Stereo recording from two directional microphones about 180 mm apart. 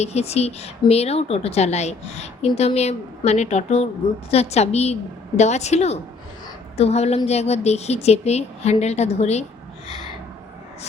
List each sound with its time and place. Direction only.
0.0 s a woman's voice: 35° left (ahead or behind)